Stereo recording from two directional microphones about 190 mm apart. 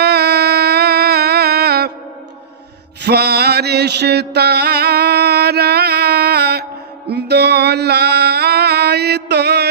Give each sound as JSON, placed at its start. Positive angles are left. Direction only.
{"t": 0.0, "sound": "music", "side_deg": -60}
{"t": 3.0, "sound": "mantra", "side_deg": -60}